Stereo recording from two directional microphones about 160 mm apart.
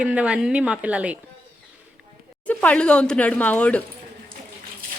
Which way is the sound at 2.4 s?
10° left (ahead or behind).